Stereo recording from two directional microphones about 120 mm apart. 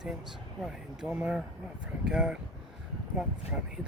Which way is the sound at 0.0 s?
5° right (ahead or behind).